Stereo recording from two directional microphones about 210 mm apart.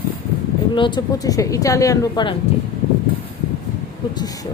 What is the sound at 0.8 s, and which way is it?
Speech, 20° left (ahead or behind).